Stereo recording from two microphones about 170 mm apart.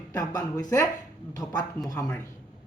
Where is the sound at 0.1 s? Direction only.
20° left (ahead or behind).